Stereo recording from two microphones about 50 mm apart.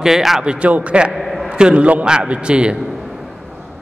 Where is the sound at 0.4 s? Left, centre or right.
Right.